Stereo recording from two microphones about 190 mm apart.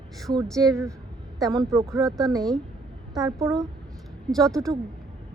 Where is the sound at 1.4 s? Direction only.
20° right (ahead or behind).